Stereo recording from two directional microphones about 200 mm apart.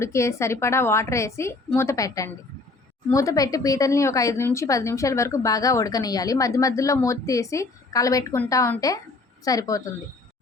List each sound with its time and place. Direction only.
0.0 s speech: 15° left (ahead or behind)